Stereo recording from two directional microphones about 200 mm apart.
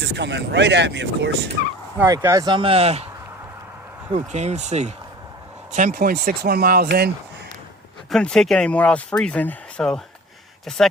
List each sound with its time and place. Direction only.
0.0 s speech: 60° right (ahead or behind)
2.0 s speech: 15° right (ahead or behind); by 3.1 s 30° right (ahead or behind)
4.1 s speech: 35° right (ahead or behind); by 7.1 s 50° right (ahead or behind)
8.1 s speech: 5° left (ahead or behind)